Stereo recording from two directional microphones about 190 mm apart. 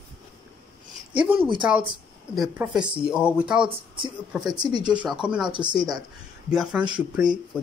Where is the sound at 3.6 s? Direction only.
25° right (ahead or behind).